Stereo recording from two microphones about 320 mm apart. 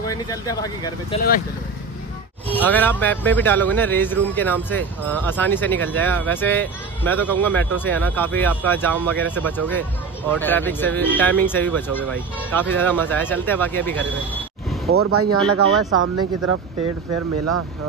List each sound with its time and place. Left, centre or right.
0.0 s speech: centre
2.4 s speech: centre
14.9 s speech: right